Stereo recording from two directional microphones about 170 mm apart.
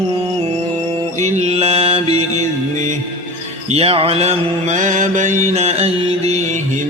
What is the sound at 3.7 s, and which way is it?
Mantra, 35° right (ahead or behind).